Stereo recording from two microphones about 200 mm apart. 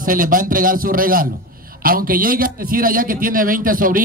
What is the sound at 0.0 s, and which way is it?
A man's voice, 45° right (ahead or behind).